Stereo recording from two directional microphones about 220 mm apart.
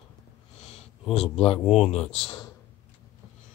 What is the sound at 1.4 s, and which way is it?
Speech, 25° left (ahead or behind).